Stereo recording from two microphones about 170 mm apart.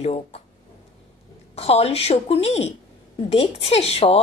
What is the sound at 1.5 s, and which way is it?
Speech, 40° left (ahead or behind).